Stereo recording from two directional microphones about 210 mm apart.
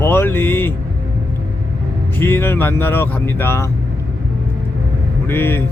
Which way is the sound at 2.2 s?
10° left (ahead or behind).